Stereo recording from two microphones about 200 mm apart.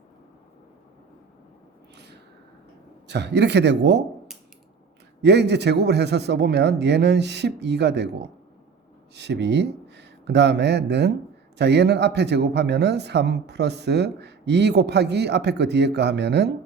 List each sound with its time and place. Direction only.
3.1 s speech: 60° right (ahead or behind)
5.2 s speech: 60° right (ahead or behind)